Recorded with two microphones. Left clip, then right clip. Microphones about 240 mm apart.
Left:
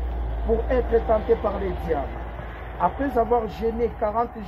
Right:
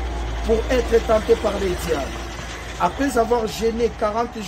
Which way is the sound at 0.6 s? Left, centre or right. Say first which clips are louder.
Right 2 dB; right.